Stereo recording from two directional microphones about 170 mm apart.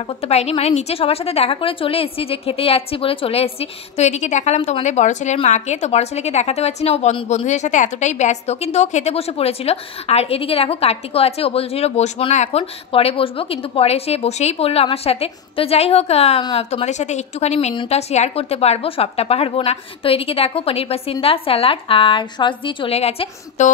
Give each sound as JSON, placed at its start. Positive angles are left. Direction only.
{"t": 0.2, "sound": "a woman's voice", "side_deg": 35}